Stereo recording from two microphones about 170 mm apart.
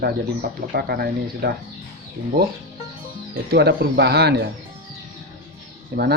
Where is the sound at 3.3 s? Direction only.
65° right (ahead or behind).